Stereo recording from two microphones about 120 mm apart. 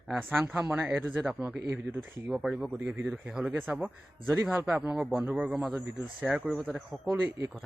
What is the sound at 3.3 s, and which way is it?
Speech, 5° right (ahead or behind).